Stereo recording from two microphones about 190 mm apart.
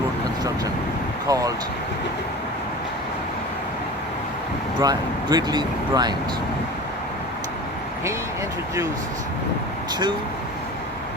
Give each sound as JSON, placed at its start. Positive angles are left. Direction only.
{"t": 1.3, "sound": "speech", "side_deg": -20}
{"t": 4.8, "sound": "speech", "side_deg": -20}